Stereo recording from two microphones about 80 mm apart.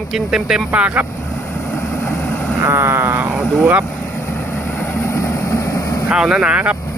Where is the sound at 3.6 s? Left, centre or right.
Centre.